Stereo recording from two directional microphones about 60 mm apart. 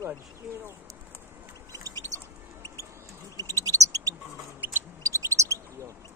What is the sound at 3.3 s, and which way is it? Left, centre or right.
Bird, right.